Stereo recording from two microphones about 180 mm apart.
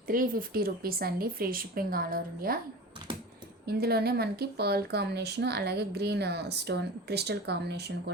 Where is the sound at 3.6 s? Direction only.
60° right (ahead or behind).